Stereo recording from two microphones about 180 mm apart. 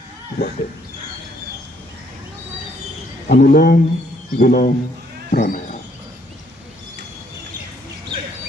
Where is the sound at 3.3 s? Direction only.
55° left (ahead or behind).